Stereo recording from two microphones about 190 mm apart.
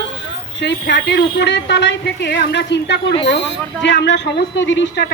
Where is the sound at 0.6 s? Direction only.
65° left (ahead or behind).